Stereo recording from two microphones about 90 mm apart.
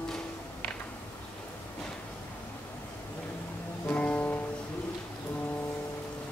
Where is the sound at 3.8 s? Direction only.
15° left (ahead or behind).